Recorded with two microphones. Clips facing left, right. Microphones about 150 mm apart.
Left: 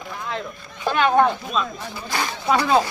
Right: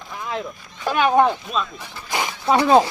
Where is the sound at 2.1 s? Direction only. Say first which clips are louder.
Right 1 dB; 20° right (ahead or behind).